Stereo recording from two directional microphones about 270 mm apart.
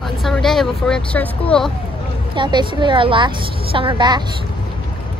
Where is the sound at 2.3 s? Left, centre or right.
Centre.